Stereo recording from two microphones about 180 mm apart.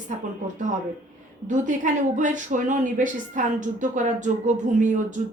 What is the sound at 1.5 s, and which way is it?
A woman's voice, 45° right (ahead or behind).